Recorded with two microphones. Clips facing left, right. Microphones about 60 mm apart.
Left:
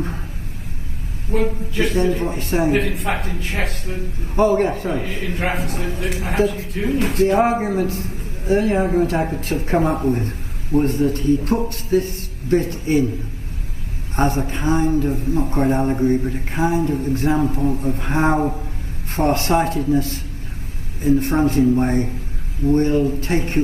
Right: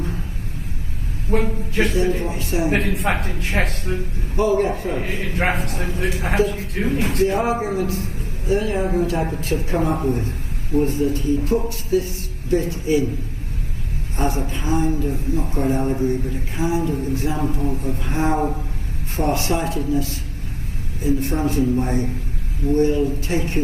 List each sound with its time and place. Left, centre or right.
1.3 s a sound: right
1.9 s speech: left
2.9 s a man's voice: right
4.4 s speech: left
5.0 s a man's voice: right
6.5 s a man's voice: right
7.2 s speech: left
9.2 s speech: left
9.5 s a man's voice: left
14.1 s speech: left
15.9 s speech: left